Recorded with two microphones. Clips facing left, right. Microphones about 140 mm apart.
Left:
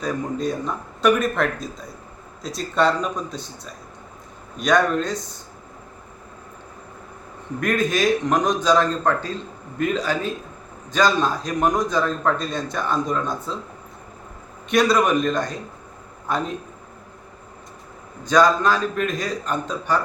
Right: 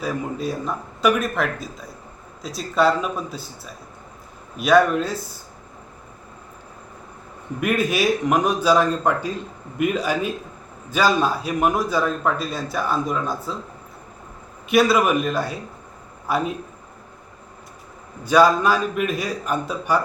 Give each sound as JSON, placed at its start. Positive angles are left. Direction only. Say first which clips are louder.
{"t": 0.0, "sound": "a man's voice", "louder": "left 1 dB", "side_deg": -5}
{"t": 7.6, "sound": "a man's voice", "louder": "even", "side_deg": -10}
{"t": 14.7, "sound": "a man's voice", "louder": "right 1 dB", "side_deg": -5}
{"t": 18.2, "sound": "a man's voice", "louder": "right 1 dB", "side_deg": -10}